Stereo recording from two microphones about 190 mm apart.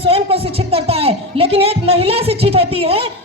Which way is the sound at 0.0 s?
30° right (ahead or behind).